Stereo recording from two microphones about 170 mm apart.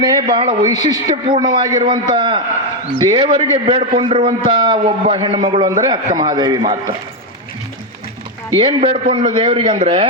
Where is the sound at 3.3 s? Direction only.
40° right (ahead or behind); by 6.9 s 25° right (ahead or behind).